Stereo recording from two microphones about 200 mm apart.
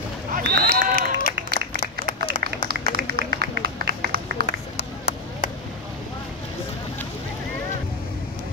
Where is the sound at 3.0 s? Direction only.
50° right (ahead or behind).